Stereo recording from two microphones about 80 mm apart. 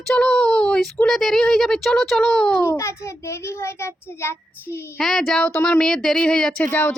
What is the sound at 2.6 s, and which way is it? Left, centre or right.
A child's voice, left.